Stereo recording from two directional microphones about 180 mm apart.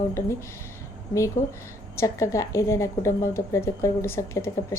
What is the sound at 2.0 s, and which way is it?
A woman's voice, 15° left (ahead or behind).